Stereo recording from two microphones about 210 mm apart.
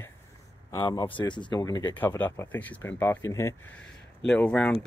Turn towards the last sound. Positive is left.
turn(degrees=5)  # may be behind; listen again after turning